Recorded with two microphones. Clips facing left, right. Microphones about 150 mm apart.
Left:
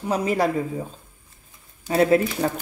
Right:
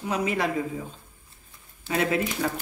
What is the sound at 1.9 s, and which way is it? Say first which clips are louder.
Speech: left 7 dB; 35° left (ahead or behind).